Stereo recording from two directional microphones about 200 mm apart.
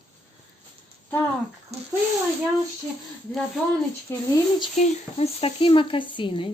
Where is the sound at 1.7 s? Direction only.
30° right (ahead or behind).